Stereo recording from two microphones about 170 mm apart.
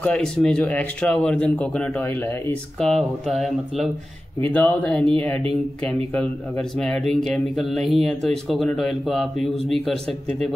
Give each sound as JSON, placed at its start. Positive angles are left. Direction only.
{"t": 0.0, "sound": "speech", "side_deg": 5}
{"t": 2.8, "sound": "speech", "side_deg": 0}